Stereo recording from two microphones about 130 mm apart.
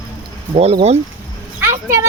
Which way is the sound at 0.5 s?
55° right (ahead or behind).